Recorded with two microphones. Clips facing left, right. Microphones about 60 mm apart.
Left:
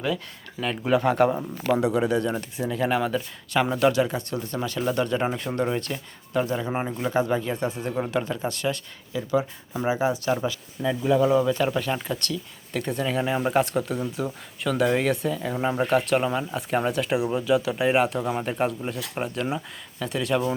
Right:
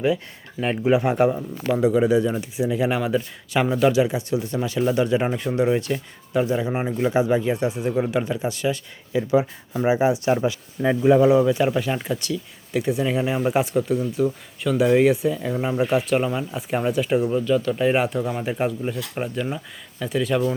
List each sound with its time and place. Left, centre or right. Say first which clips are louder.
0.9 s speech: right 2 dB; centre
1.6 s speech: right 4 dB; centre
9.1 s speech: right 5 dB; right; by 20.6 s centre